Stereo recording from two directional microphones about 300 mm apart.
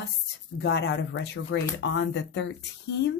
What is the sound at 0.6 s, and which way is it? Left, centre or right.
Speech, left.